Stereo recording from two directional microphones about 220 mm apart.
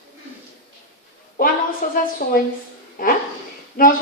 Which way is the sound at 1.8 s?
35° left (ahead or behind).